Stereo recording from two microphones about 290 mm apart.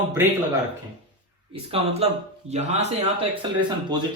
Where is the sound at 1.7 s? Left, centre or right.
Right.